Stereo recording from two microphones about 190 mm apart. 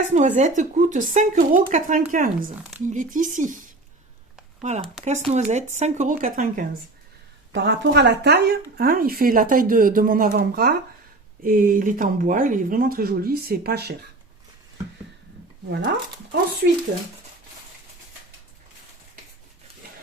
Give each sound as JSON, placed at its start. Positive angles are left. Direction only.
{"t": 0.1, "sound": "speech", "side_deg": -35}
{"t": 7.5, "sound": "speech", "side_deg": -65}
{"t": 15.7, "sound": "speech", "side_deg": -65}